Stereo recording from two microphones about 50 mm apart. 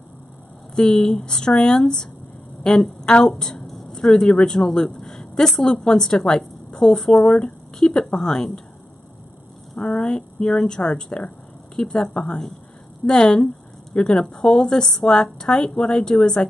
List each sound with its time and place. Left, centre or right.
0.7 s a woman's voice: centre
9.8 s a woman's voice: left